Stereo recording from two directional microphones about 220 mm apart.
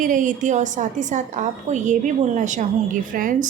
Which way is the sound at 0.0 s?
35° right (ahead or behind).